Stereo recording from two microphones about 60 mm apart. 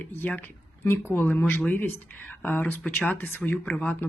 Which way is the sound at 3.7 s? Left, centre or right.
Left.